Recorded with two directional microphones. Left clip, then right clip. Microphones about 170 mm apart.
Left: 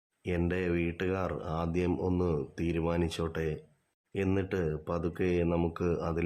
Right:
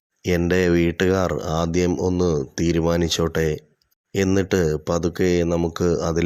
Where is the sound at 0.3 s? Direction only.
45° right (ahead or behind).